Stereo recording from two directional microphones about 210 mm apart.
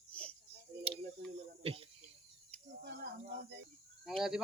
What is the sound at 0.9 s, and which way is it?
Tick, 25° right (ahead or behind).